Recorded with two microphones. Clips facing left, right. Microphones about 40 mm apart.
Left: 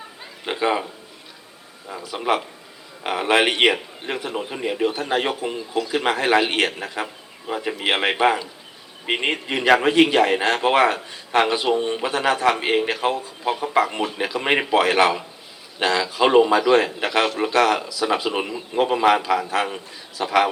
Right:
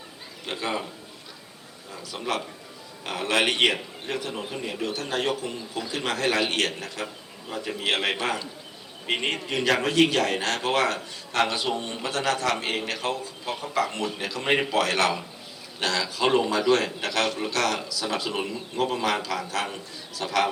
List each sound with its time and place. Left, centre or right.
0.4 s a man's voice: left
2.0 s a man's voice: left